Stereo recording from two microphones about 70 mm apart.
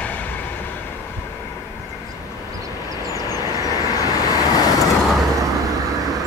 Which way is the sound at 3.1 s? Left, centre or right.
Left.